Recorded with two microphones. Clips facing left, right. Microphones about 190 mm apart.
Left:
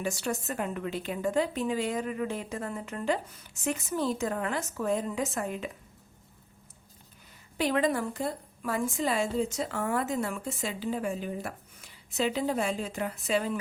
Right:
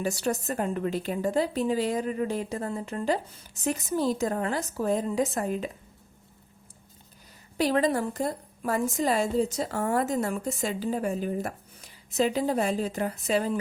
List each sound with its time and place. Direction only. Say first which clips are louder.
0.0 s a woman's voice: right 4 dB; 40° right (ahead or behind)
7.6 s a woman's voice: right 3 dB; 35° right (ahead or behind)